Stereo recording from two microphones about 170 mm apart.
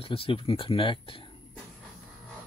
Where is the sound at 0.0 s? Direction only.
35° left (ahead or behind).